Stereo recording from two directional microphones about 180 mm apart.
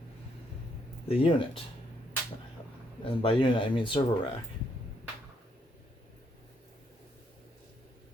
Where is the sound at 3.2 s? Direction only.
30° left (ahead or behind).